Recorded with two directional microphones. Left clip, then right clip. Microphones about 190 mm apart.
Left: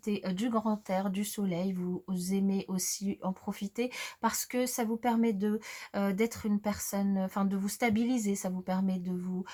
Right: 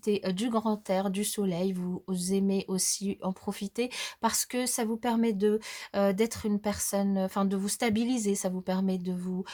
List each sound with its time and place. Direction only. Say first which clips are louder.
0.0 s speech: right 5 dB; 35° right (ahead or behind)